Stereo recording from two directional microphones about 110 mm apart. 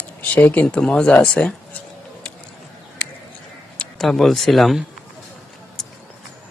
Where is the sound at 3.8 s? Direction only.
Centre (ahead or behind).